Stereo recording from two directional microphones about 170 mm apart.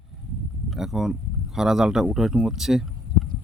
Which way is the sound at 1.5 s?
5° right (ahead or behind).